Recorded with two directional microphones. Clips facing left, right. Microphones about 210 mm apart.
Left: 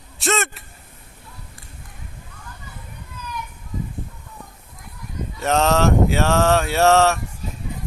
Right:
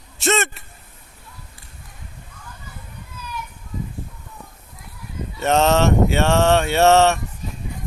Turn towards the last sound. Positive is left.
turn(degrees=0)  # may be behind; listen again after turning